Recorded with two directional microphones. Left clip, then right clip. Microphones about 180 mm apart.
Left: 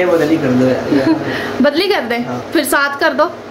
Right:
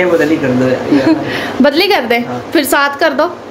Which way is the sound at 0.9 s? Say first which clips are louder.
Right 3 dB; 10° right (ahead or behind).